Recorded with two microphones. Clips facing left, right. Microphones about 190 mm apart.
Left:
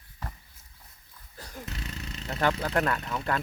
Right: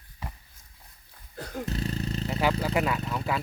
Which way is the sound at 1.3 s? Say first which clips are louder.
Right 8 dB; 65° right (ahead or behind).